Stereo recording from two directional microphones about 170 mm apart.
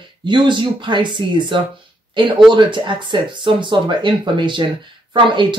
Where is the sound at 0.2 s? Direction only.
30° right (ahead or behind).